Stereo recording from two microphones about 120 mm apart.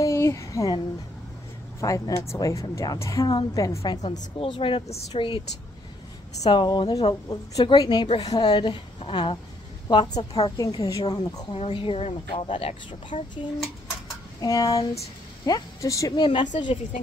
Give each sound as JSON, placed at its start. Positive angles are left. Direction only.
{"t": 0.0, "sound": "a sound", "side_deg": 25}
{"t": 1.8, "sound": "a woman's voice", "side_deg": 25}
{"t": 4.0, "sound": "a woman's voice", "side_deg": 80}
{"t": 4.4, "sound": "speech", "side_deg": 45}
{"t": 6.5, "sound": "speech", "side_deg": 40}
{"t": 10.6, "sound": "speech", "side_deg": 30}
{"t": 11.5, "sound": "speech", "side_deg": 50}
{"t": 14.4, "sound": "a woman's voice", "side_deg": 30}
{"t": 16.3, "sound": "speech", "side_deg": 40}